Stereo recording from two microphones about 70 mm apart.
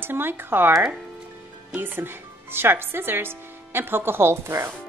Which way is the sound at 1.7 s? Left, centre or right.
Right.